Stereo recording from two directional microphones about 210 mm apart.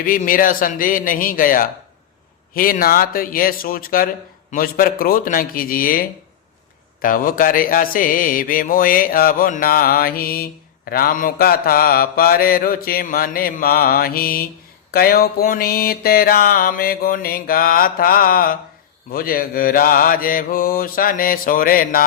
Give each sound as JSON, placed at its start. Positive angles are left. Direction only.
{"t": 0.0, "sound": "a man's voice", "side_deg": 40}